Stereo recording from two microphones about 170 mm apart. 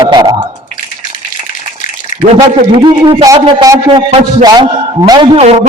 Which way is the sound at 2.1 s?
45° left (ahead or behind).